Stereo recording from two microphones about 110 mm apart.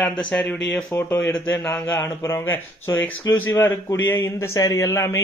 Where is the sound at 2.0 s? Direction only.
25° left (ahead or behind).